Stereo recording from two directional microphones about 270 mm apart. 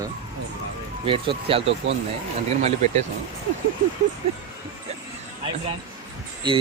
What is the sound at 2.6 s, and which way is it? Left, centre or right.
Speech, right.